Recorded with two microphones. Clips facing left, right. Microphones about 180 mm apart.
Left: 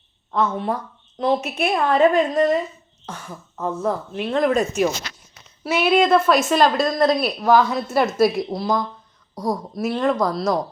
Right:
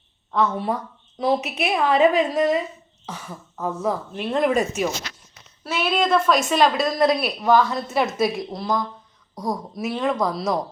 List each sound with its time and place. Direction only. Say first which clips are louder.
0.3 s speech: even; centre (ahead or behind)
5.6 s speech: left 5 dB; 15° left (ahead or behind); by 7.3 s 5° right (ahead or behind)
7.4 s speech: left 1 dB; 5° left (ahead or behind)